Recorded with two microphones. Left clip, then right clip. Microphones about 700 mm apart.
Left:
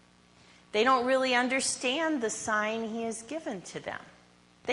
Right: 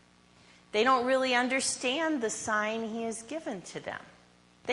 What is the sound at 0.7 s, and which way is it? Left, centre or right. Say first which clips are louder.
A woman's voice: left 1 dB; right.